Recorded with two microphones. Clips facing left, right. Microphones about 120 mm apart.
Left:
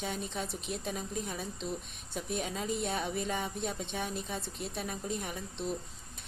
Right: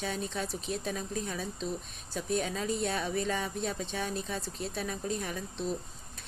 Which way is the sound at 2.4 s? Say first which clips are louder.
Right 2 dB; 25° left (ahead or behind).